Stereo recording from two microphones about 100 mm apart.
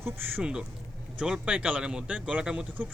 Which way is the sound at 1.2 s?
10° right (ahead or behind).